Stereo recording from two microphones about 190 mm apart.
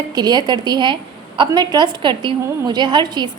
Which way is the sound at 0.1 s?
20° right (ahead or behind).